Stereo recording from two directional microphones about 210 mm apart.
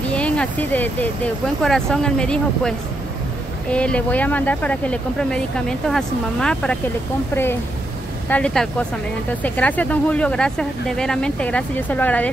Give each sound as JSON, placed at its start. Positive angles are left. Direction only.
{"t": 0.1, "sound": "speech", "side_deg": 5}
{"t": 3.7, "sound": "speech", "side_deg": 5}
{"t": 8.3, "sound": "speech", "side_deg": 5}